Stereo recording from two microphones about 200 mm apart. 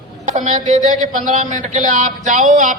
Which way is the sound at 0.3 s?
40° right (ahead or behind).